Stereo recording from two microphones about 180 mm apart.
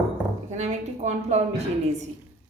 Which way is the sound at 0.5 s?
40° right (ahead or behind).